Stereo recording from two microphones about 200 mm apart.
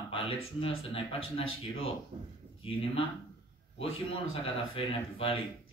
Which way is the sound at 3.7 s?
25° left (ahead or behind).